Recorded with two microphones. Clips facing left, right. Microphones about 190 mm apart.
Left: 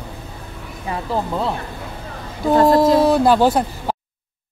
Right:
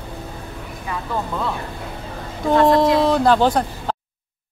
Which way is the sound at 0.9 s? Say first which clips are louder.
Left 3 dB; 30° left (ahead or behind).